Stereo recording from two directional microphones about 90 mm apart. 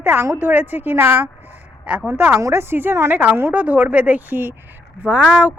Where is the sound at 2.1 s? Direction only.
25° right (ahead or behind).